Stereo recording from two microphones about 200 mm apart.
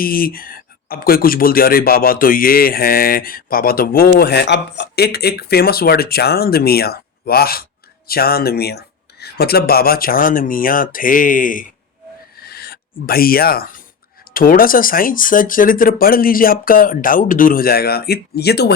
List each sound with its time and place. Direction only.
0.0 s speech: 45° left (ahead or behind)
12.4 s a sound: 50° left (ahead or behind)
14.3 s speech: 45° left (ahead or behind)